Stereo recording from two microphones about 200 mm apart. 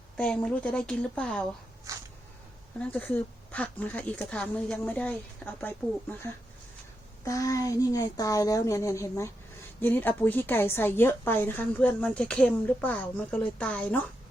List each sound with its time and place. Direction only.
0.2 s a woman's voice: 5° left (ahead or behind)
2.8 s a woman's voice: 10° left (ahead or behind)
7.3 s a woman's voice: 15° left (ahead or behind)